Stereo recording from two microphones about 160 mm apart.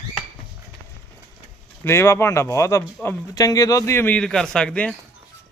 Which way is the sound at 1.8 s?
15° left (ahead or behind).